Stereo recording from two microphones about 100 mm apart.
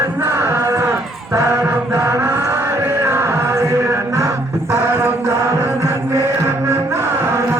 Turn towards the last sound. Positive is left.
turn(degrees=-30)  # may be behind; listen again after turning